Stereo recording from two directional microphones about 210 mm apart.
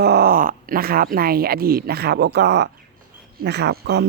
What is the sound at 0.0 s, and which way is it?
A woman's voice, 50° right (ahead or behind).